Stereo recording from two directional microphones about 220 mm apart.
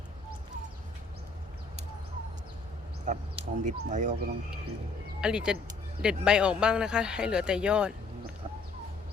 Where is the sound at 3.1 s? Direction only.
35° right (ahead or behind).